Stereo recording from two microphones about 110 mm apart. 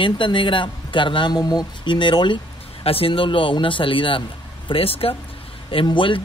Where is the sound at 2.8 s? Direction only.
60° left (ahead or behind).